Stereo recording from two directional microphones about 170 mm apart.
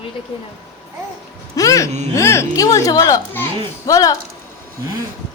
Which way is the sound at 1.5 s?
20° left (ahead or behind).